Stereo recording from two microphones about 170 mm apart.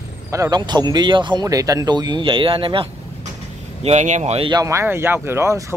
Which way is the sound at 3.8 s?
40° right (ahead or behind).